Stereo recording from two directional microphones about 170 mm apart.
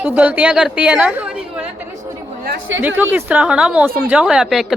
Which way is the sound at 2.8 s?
10° right (ahead or behind).